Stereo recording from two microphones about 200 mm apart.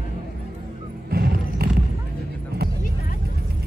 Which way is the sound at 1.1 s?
50° right (ahead or behind).